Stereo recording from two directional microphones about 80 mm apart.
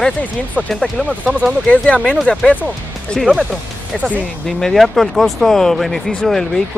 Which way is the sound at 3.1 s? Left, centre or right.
Centre.